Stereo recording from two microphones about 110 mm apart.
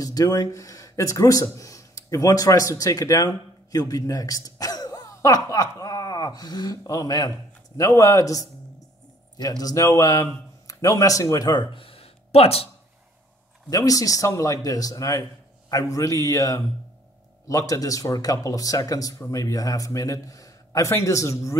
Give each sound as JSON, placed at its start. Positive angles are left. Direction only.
{"t": 0.0, "sound": "speech", "side_deg": 35}
{"t": 11.7, "sound": "a sound", "side_deg": 60}
{"t": 13.7, "sound": "speech", "side_deg": 30}